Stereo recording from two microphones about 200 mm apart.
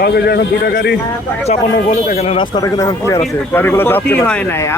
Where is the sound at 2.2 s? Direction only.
30° left (ahead or behind); by 4.7 s 10° left (ahead or behind).